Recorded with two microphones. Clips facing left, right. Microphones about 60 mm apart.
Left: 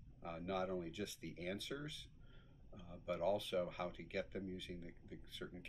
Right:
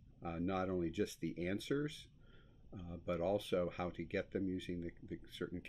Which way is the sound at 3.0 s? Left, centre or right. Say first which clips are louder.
Right 2 dB; right.